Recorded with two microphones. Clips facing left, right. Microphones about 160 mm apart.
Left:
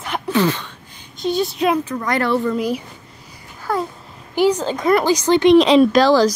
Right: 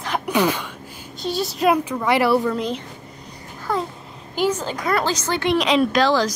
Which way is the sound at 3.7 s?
Centre (ahead or behind).